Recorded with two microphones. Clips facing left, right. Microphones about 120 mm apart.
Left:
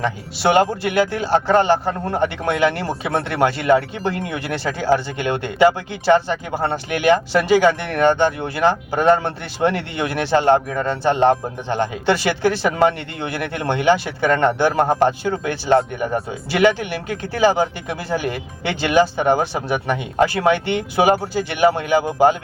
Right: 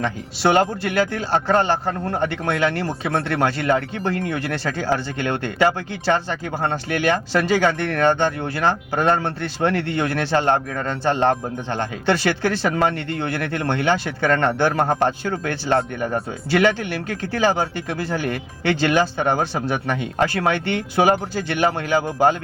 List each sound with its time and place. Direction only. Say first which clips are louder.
0.5 s speech: left 4 dB; 10° left (ahead or behind)